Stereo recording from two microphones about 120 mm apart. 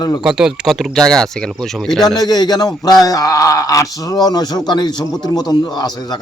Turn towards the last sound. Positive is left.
turn(degrees=35)  # may be behind; listen again after turning